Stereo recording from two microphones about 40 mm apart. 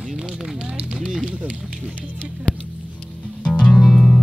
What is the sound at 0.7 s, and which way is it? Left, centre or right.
Run, right.